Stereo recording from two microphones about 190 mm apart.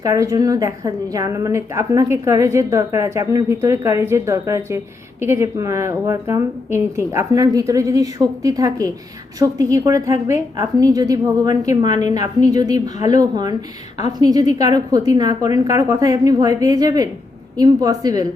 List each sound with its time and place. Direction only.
0.0 s a woman's voice: 20° right (ahead or behind)
12.1 s a woman's voice: 35° left (ahead or behind)
12.5 s a woman's voice: 20° right (ahead or behind)